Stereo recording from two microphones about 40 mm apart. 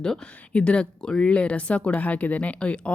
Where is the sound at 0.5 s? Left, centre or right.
Left.